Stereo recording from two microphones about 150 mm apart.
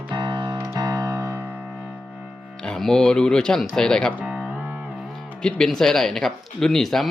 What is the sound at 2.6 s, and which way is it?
Speech, 5° left (ahead or behind).